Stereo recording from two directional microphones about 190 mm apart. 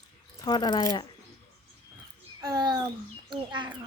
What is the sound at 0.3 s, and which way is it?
Speech, 20° left (ahead or behind).